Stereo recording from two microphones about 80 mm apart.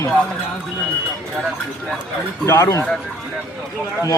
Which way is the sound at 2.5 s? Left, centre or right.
Left.